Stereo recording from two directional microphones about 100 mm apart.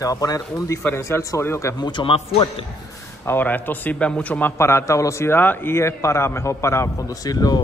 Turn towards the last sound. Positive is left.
turn(degrees=40)  # may be behind; listen again after turning